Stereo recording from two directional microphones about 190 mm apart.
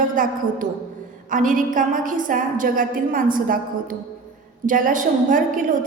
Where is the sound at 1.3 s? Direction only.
45° right (ahead or behind).